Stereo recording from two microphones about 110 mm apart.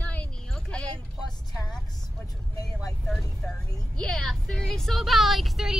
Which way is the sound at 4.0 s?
5° left (ahead or behind).